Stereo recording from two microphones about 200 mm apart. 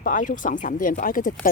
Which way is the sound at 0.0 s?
40° left (ahead or behind).